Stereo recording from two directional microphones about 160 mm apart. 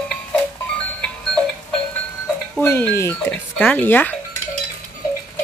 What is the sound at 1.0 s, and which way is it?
Goat, 5° left (ahead or behind).